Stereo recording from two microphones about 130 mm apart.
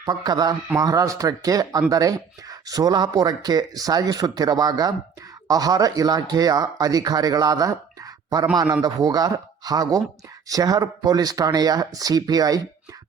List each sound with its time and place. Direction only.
0.0 s speech: 30° right (ahead or behind)